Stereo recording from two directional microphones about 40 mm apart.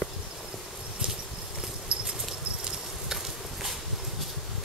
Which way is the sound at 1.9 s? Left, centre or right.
Right.